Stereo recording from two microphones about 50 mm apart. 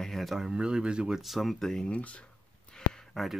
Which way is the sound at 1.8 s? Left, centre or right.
Left.